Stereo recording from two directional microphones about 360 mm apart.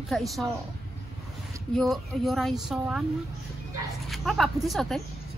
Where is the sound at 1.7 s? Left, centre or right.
Centre.